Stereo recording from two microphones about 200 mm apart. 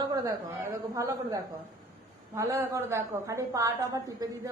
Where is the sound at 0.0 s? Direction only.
15° right (ahead or behind).